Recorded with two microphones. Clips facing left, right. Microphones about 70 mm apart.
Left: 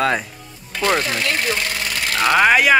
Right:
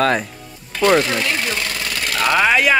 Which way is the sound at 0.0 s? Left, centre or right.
Centre.